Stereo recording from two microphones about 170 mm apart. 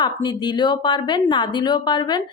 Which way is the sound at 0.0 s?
25° left (ahead or behind).